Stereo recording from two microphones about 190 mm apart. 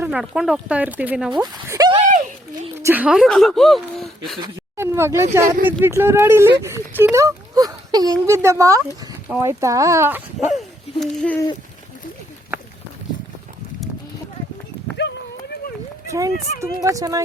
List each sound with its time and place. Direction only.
0.0 s speech: 5° right (ahead or behind)
1.3 s speech: 20° right (ahead or behind)
1.6 s a sound: 15° right (ahead or behind)
2.8 s speech: 10° right (ahead or behind)
4.8 s speech: 15° right (ahead or behind); by 11.4 s 5° left (ahead or behind)
14.9 s clip-clop: 65° left (ahead or behind)
16.0 s speech: 15° right (ahead or behind)